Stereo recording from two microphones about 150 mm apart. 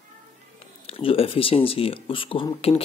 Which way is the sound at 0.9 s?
40° left (ahead or behind).